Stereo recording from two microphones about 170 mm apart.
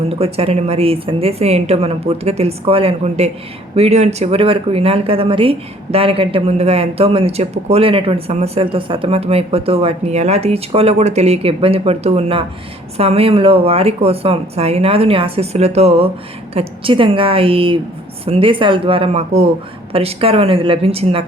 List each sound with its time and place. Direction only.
0.1 s speech: 35° right (ahead or behind)